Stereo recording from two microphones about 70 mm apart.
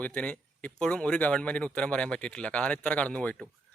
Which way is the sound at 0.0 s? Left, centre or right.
Centre.